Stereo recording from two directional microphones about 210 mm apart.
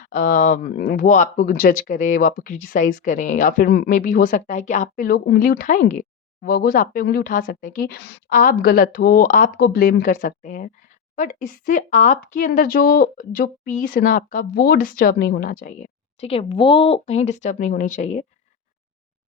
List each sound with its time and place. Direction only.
0.0 s speech: 35° left (ahead or behind)